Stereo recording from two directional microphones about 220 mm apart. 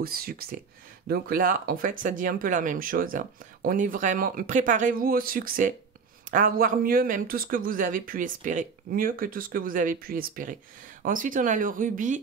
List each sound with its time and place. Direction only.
0.0 s speech: 45° right (ahead or behind)